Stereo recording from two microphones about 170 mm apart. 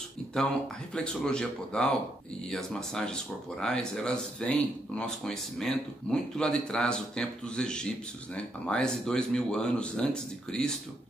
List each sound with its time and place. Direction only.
0.9 s speech: 5° left (ahead or behind)